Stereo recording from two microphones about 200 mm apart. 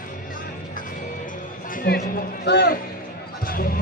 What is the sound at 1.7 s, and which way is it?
A man's voice, 50° left (ahead or behind).